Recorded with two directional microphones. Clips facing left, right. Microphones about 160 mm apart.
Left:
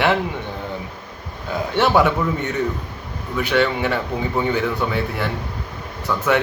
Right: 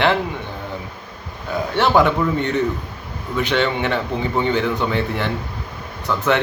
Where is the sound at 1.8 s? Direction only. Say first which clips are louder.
Right 1 dB; 15° left (ahead or behind).